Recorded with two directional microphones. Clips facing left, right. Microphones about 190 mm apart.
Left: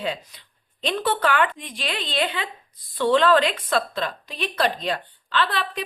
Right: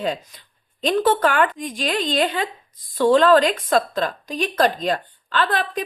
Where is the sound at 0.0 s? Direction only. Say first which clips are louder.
Right 4 dB; 45° right (ahead or behind).